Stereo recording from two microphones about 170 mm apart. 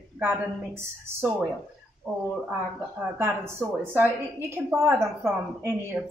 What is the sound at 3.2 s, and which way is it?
A woman's voice, 15° right (ahead or behind).